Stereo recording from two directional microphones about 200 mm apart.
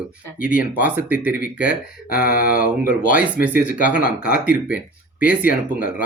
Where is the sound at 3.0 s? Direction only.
45° left (ahead or behind).